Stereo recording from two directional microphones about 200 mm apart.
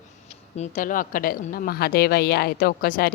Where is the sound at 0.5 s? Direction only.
35° left (ahead or behind).